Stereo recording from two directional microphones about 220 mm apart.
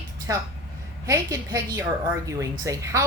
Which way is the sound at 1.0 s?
15° right (ahead or behind).